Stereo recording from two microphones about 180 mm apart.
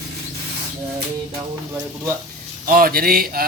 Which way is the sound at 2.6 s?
50° right (ahead or behind).